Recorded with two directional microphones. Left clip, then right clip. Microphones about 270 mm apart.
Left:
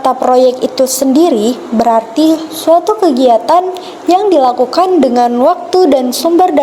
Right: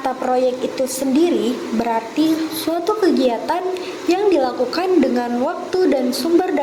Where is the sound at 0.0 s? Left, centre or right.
Left.